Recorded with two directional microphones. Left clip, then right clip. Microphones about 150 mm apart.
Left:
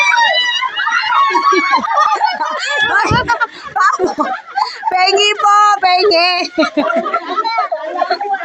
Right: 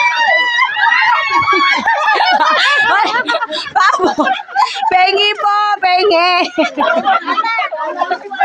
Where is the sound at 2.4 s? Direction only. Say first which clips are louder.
Right 7 dB; 25° right (ahead or behind).